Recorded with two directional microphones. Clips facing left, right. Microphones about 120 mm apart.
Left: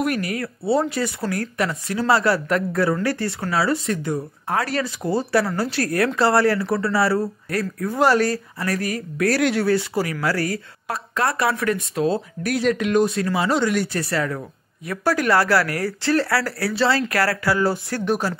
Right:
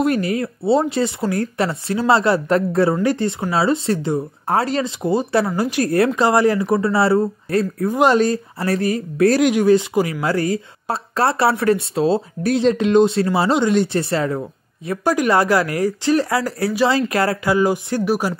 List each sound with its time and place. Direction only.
0.0 s speech: 25° right (ahead or behind)